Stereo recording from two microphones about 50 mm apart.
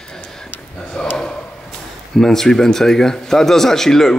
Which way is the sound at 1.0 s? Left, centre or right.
Centre.